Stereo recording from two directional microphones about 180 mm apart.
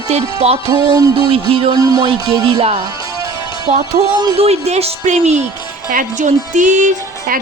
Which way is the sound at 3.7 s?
35° right (ahead or behind).